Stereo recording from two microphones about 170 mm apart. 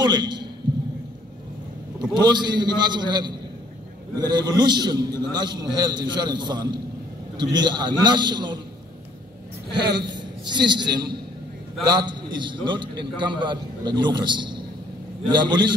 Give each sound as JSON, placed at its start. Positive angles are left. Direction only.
{"t": 0.0, "sound": "a man's voice", "side_deg": -25}
{"t": 2.0, "sound": "a man's voice", "side_deg": -25}
{"t": 10.0, "sound": "a woman's voice", "side_deg": -25}